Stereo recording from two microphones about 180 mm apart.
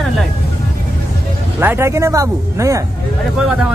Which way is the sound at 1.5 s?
15° right (ahead or behind).